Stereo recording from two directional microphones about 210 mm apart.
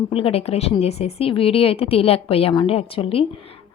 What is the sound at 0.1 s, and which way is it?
A woman's voice, 25° left (ahead or behind).